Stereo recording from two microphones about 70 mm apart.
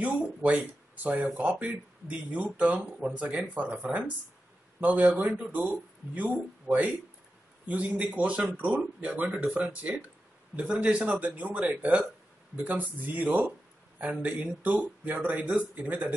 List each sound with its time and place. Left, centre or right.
0.0 s speech: centre
14.6 s speech: right